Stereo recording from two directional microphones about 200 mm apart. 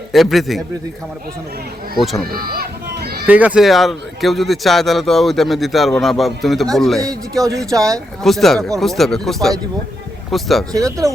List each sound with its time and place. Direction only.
0.1 s speech: centre (ahead or behind)
2.3 s run: 50° right (ahead or behind)
3.2 s speech: 5° right (ahead or behind)
7.7 s speech: 15° right (ahead or behind)
8.2 s speech: centre (ahead or behind)
10.7 s speech: 15° right (ahead or behind)